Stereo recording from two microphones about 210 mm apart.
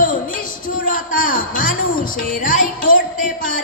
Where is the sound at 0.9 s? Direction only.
40° left (ahead or behind).